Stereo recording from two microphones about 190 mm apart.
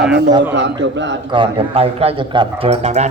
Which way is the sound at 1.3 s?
30° right (ahead or behind).